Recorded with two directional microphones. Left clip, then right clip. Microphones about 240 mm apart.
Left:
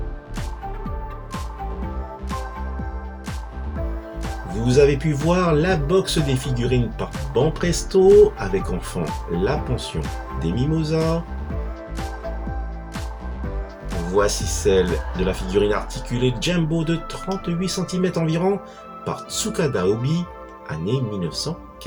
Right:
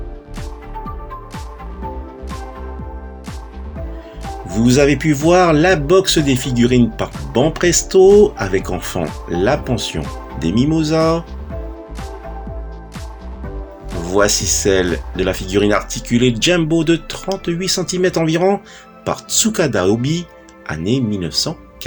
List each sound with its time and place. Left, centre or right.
4.6 s speech: left
14.1 s speech: left